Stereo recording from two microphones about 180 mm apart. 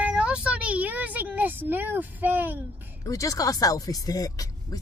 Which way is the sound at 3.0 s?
20° left (ahead or behind).